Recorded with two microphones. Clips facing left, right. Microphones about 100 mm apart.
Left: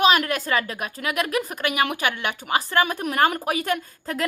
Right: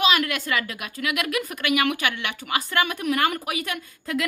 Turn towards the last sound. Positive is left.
turn(degrees=35)  # may be behind; listen again after turning